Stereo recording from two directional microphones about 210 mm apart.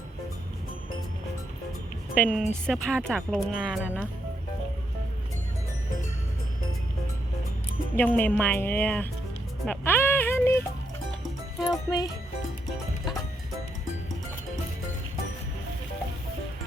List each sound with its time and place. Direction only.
2.1 s speech: 5° left (ahead or behind)
7.9 s speech: 10° left (ahead or behind)
9.6 s music: 10° left (ahead or behind)
11.6 s music: 20° left (ahead or behind)